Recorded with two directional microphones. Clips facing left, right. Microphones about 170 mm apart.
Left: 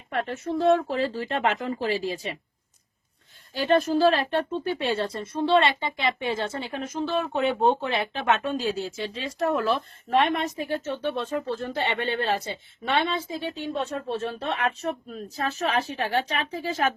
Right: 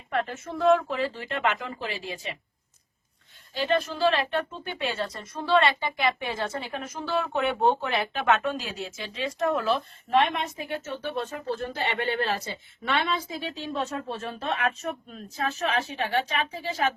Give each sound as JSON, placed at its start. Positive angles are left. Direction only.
{"t": 0.3, "sound": "speech", "side_deg": 30}
{"t": 3.5, "sound": "speech", "side_deg": 45}